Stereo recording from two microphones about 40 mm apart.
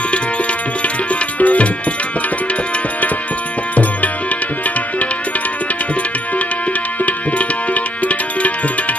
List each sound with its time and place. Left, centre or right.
1.4 s tabla: left
7.1 s music: left